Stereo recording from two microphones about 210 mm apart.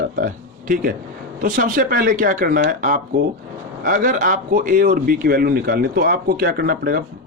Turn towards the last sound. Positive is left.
turn(degrees=-45)  # may be behind; listen again after turning